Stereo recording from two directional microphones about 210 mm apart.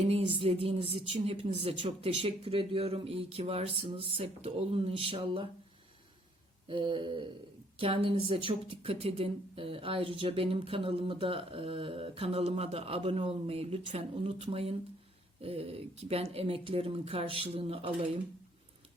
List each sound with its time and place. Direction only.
0.0 s speech: 30° right (ahead or behind)
6.7 s speech: 25° right (ahead or behind)